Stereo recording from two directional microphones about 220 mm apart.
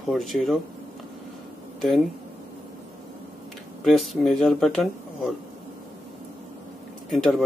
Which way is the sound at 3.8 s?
Centre (ahead or behind).